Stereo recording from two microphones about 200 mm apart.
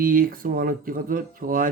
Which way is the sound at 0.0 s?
45° right (ahead or behind).